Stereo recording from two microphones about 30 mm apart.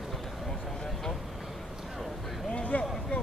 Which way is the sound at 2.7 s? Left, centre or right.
Left.